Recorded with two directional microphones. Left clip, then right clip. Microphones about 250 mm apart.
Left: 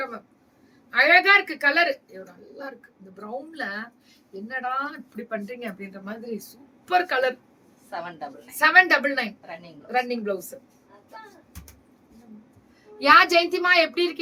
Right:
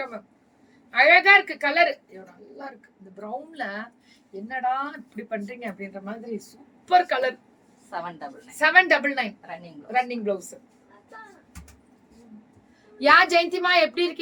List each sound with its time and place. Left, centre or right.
0.9 s speech: centre
3.5 s a woman's voice: centre
13.0 s speech: centre